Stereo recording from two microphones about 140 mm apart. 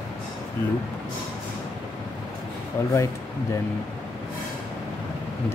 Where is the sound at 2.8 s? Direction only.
20° left (ahead or behind).